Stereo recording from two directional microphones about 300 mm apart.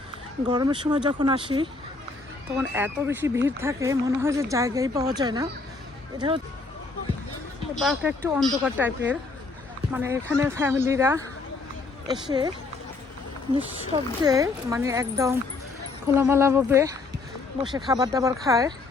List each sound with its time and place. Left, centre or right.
0.4 s speech: centre
7.8 s speech: centre
13.9 s speech: centre